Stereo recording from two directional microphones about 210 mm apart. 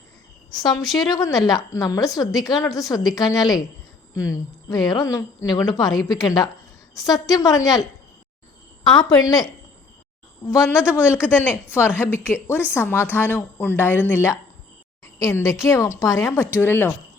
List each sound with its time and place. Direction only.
0.5 s a woman's voice: 20° left (ahead or behind)
8.9 s a woman's voice: 20° left (ahead or behind)